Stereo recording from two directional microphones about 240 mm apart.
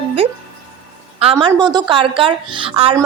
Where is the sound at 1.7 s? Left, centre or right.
Centre.